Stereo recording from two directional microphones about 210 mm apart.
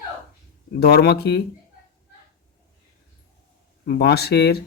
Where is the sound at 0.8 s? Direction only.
50° left (ahead or behind).